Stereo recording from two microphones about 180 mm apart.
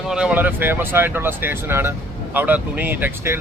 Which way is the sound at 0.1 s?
5° right (ahead or behind).